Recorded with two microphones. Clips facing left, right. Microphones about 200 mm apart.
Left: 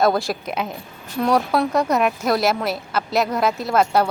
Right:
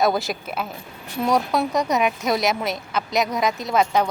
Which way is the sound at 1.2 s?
Centre (ahead or behind).